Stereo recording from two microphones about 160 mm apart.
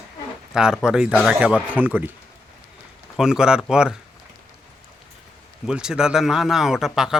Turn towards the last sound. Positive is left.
turn(degrees=-5)  # may be behind; listen again after turning